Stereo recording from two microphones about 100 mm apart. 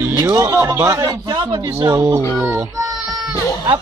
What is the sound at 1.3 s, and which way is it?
Speech, 45° right (ahead or behind).